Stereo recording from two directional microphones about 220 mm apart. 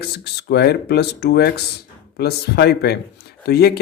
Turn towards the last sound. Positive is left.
turn(degrees=45)  # may be behind; listen again after turning